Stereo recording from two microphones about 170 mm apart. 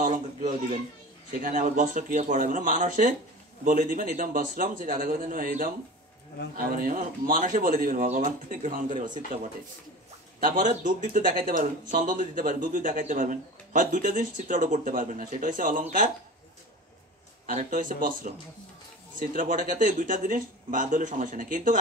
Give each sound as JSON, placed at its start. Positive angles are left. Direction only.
{"t": 0.0, "sound": "a sound", "side_deg": -50}
{"t": 1.4, "sound": "speech", "side_deg": -55}
{"t": 10.4, "sound": "speech", "side_deg": -50}
{"t": 17.5, "sound": "speech", "side_deg": -50}